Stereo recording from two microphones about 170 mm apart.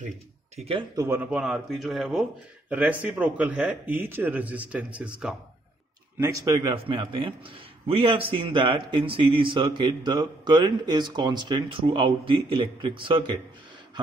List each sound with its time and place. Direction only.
0.6 s speech: 35° right (ahead or behind)
0.9 s a man's voice: 15° right (ahead or behind)